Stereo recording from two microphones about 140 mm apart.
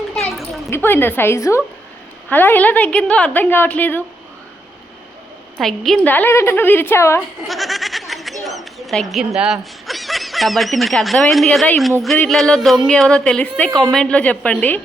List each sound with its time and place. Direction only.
0.1 s a sound: centre (ahead or behind)
0.7 s a woman's voice: 15° left (ahead or behind)
5.5 s speech: centre (ahead or behind)
6.1 s a woman's voice: 15° left (ahead or behind)
7.4 s a sound: centre (ahead or behind)
12.3 s a woman's voice: centre (ahead or behind)